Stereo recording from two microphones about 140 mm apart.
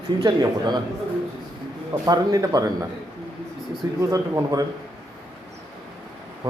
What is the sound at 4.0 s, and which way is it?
Speech, 25° right (ahead or behind).